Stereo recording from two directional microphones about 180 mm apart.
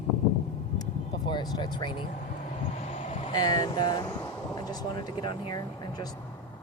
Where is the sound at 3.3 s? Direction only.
20° left (ahead or behind).